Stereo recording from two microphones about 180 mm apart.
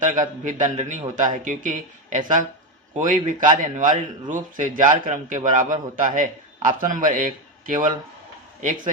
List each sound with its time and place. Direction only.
0.0 s speech: 45° right (ahead or behind)